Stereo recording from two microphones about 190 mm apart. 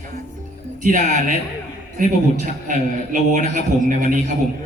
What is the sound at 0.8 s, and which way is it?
A man's voice, 40° right (ahead or behind).